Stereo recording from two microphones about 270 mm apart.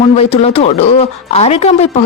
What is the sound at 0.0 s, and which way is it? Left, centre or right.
Speech, left.